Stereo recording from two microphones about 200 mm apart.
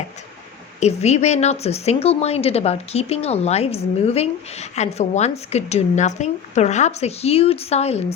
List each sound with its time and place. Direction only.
0.8 s a woman's voice: 35° left (ahead or behind)